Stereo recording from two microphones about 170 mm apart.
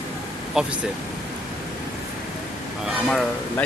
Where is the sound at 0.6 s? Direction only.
5° right (ahead or behind).